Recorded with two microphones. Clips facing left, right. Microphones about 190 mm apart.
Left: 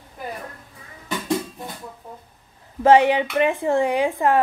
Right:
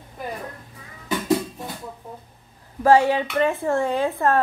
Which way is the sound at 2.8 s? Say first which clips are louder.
Left 2 dB; 20° left (ahead or behind).